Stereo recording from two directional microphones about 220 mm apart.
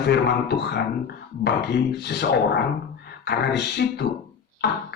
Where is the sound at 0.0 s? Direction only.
50° left (ahead or behind).